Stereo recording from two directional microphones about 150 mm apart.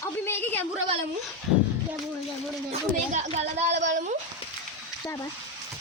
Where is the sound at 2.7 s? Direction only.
45° right (ahead or behind).